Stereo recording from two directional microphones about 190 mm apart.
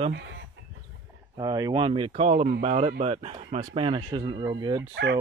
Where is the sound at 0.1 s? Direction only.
65° right (ahead or behind).